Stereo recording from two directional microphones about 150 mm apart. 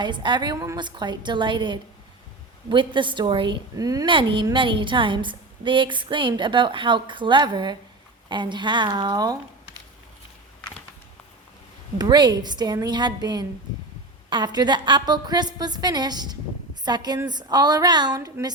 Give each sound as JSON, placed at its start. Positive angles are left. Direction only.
{"t": 0.0, "sound": "a woman's voice", "side_deg": -30}
{"t": 11.9, "sound": "a woman's voice", "side_deg": -30}